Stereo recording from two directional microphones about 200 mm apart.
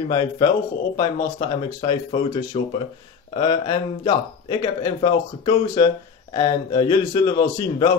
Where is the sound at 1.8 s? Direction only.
30° left (ahead or behind).